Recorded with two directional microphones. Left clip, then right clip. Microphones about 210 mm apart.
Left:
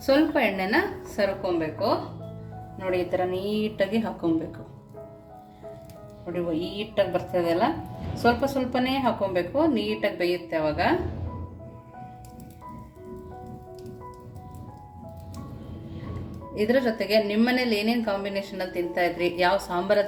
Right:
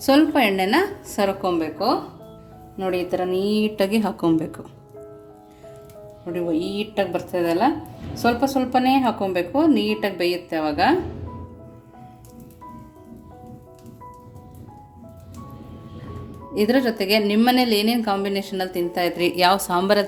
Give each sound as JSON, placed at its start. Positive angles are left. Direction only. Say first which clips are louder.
{"t": 0.0, "sound": "a woman's voice", "louder": "right 4 dB", "side_deg": -45}
{"t": 2.7, "sound": "a woman's voice", "louder": "right 3 dB", "side_deg": -50}
{"t": 6.3, "sound": "a woman's voice", "louder": "right 5 dB", "side_deg": -50}
{"t": 16.6, "sound": "a woman's voice", "louder": "right 3 dB", "side_deg": -45}